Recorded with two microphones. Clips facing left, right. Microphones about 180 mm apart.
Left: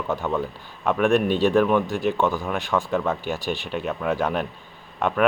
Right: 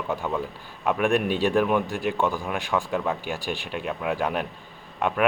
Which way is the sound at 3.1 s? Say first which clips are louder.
Left 3 dB; centre (ahead or behind).